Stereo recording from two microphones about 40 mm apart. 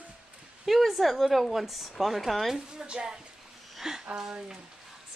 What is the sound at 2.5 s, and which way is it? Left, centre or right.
A woman's voice, centre.